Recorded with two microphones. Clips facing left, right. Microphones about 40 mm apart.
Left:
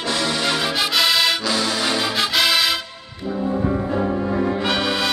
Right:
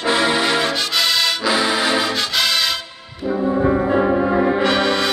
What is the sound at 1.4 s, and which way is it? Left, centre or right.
Music, centre.